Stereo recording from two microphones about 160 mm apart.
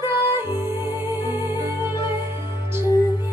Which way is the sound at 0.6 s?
15° right (ahead or behind).